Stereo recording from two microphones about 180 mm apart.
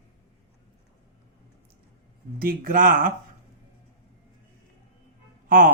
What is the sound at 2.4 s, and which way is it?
Speech, 55° right (ahead or behind).